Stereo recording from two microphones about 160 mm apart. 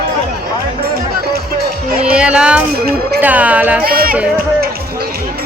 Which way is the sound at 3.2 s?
10° right (ahead or behind).